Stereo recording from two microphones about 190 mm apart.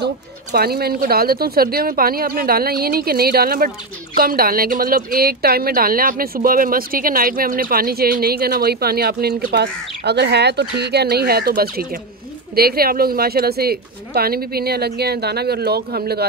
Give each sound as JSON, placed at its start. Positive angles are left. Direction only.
{"t": 0.5, "sound": "speech", "side_deg": -55}